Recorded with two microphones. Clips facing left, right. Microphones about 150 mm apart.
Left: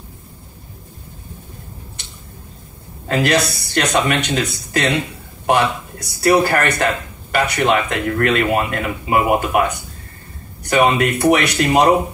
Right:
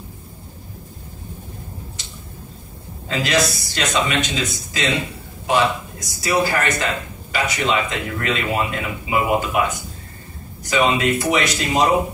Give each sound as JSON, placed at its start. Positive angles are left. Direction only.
{"t": 3.1, "sound": "speech", "side_deg": 60}